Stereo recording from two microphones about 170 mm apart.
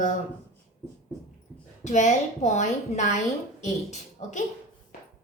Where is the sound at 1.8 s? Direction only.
45° left (ahead or behind).